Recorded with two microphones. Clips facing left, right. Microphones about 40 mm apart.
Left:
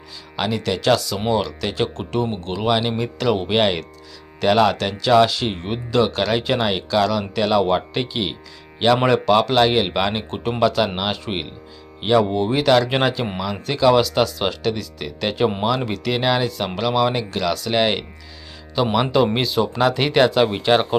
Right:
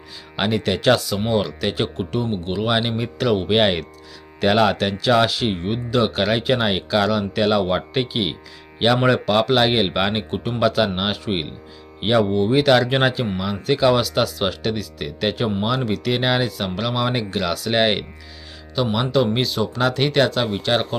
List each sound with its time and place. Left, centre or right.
0.3 s speech: centre
18.8 s speech: centre